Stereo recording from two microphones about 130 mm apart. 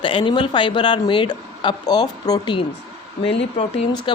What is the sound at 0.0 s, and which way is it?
A woman's voice, 40° left (ahead or behind).